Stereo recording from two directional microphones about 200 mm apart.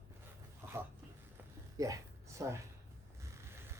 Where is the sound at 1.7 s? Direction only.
15° right (ahead or behind).